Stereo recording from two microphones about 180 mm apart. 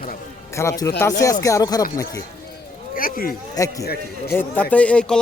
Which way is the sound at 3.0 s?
55° left (ahead or behind).